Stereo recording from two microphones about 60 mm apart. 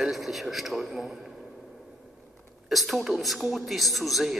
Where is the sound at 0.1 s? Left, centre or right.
Centre.